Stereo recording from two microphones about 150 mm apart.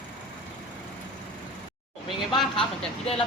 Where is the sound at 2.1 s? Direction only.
Centre (ahead or behind).